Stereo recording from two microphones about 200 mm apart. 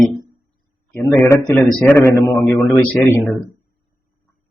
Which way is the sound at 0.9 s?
15° left (ahead or behind).